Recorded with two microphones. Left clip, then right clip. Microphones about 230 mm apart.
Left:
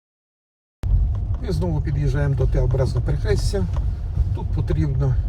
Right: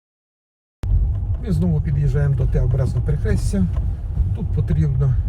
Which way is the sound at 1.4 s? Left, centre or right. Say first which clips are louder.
Right 1 dB; left.